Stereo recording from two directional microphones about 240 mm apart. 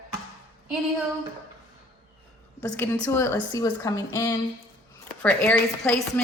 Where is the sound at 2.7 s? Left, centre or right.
Centre.